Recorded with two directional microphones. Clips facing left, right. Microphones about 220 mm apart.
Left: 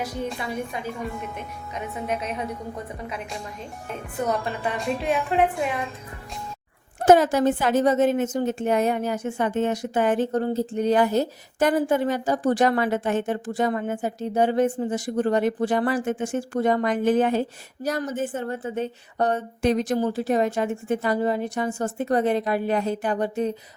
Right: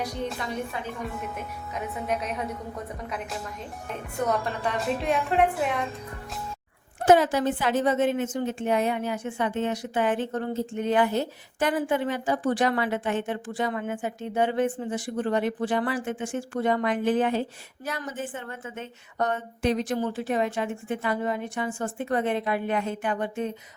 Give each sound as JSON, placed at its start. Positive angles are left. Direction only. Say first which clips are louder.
{"t": 0.0, "sound": "a woman's voice", "louder": "left 2 dB", "side_deg": 5}
{"t": 3.8, "sound": "a woman's voice", "louder": "left 1 dB", "side_deg": 0}
{"t": 7.0, "sound": "a woman's voice", "louder": "left 3 dB", "side_deg": 45}